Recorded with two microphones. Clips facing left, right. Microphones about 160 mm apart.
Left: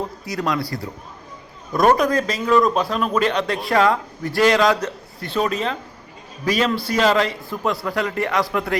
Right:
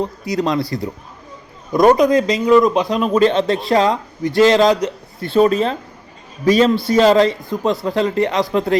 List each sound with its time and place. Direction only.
0.3 s a man's voice: 25° right (ahead or behind)
3.0 s a man's voice: 30° right (ahead or behind)
5.3 s a man's voice: 35° right (ahead or behind)